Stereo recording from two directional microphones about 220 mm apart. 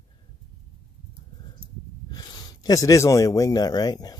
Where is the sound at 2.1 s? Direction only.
20° left (ahead or behind).